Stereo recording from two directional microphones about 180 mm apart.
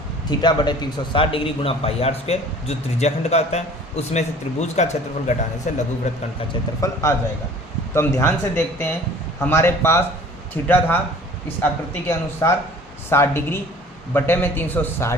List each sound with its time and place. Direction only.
0.3 s a man's voice: 25° left (ahead or behind)
4.6 s a man's voice: 40° left (ahead or behind)
6.5 s a man's voice: 20° left (ahead or behind)